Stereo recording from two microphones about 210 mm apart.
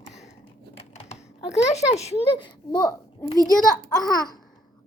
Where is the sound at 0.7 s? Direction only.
30° left (ahead or behind).